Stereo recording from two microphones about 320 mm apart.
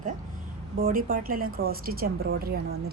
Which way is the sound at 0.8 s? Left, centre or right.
Right.